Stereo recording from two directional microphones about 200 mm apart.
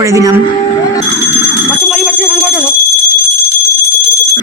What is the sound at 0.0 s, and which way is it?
Speech, 15° right (ahead or behind).